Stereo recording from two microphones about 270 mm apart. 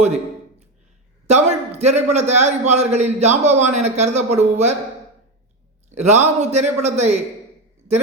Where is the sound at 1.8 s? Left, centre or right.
Right.